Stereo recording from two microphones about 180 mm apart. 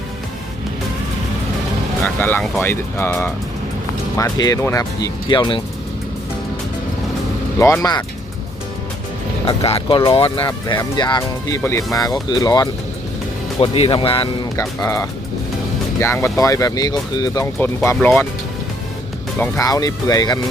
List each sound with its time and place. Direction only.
2.0 s speech: 10° left (ahead or behind); by 5.6 s 25° left (ahead or behind)
7.6 s speech: 15° left (ahead or behind)
9.5 s speech: 35° left (ahead or behind)
10.4 s speech: 20° left (ahead or behind)
13.6 s speech: 30° left (ahead or behind)
14.5 s speech: 15° left (ahead or behind)
19.4 s speech: 20° left (ahead or behind)